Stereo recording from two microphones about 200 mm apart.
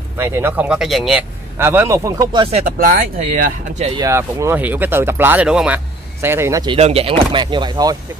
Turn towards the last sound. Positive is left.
turn(degrees=-20)  # may be behind; listen again after turning